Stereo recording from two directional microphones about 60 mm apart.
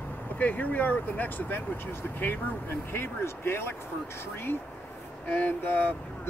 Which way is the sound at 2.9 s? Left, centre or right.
Left.